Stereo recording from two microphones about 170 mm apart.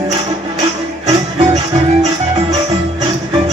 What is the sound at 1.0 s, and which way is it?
Music, 35° right (ahead or behind).